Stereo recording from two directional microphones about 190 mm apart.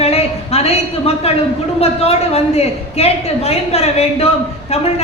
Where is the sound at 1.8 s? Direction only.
35° left (ahead or behind).